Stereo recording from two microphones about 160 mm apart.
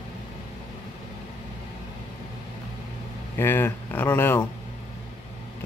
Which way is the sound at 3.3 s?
15° left (ahead or behind).